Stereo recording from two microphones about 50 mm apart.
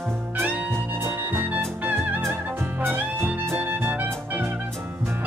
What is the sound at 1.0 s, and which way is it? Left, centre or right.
Music, right.